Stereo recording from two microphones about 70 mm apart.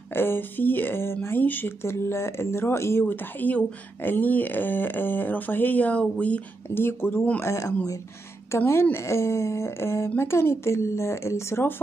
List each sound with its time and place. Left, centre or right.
0.1 s speech: left
6.7 s speech: left
7.4 s speech: left